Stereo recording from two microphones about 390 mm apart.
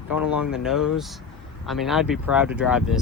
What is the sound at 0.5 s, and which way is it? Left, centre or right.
Speech, centre.